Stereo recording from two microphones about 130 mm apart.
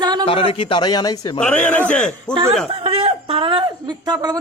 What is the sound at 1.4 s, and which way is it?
Speech, 10° left (ahead or behind).